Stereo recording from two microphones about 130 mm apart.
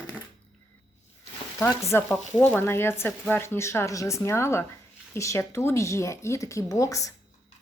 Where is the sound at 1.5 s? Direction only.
20° left (ahead or behind).